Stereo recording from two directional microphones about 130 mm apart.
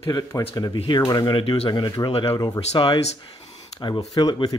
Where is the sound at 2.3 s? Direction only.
30° left (ahead or behind).